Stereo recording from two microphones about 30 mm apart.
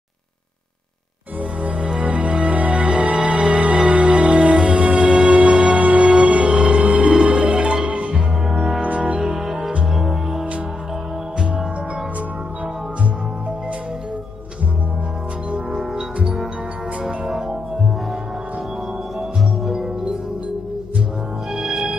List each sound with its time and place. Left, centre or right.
2.0 s music: right
2.9 s music: right
5.8 s music: right
6.0 s music: right
8.8 s music: right
9.9 s music: centre
19.6 s music: centre
21.5 s music: centre